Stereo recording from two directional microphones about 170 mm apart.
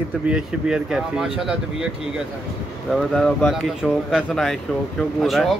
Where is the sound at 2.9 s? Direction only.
5° left (ahead or behind).